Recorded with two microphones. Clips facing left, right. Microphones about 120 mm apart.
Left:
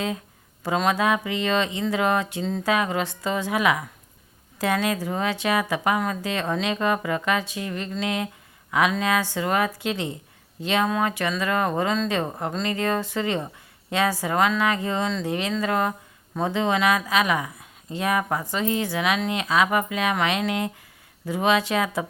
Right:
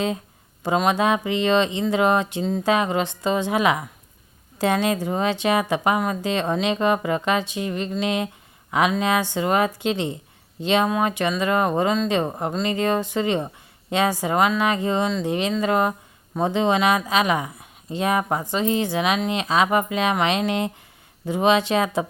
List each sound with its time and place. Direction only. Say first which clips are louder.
0.6 s speech: right 2 dB; 20° right (ahead or behind)